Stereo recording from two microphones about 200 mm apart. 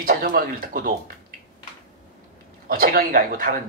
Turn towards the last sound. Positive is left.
turn(degrees=-45)  # may be behind; listen again after turning